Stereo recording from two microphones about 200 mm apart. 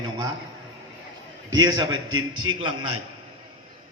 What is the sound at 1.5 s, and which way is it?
A man's voice, 15° right (ahead or behind).